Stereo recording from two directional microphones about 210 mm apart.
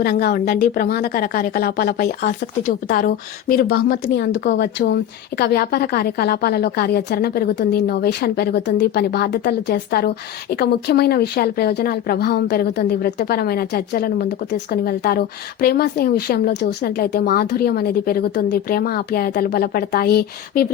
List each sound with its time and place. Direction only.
0.0 s speech: 50° left (ahead or behind)
4.0 s a woman's voice: 60° left (ahead or behind); by 20.7 s 45° left (ahead or behind)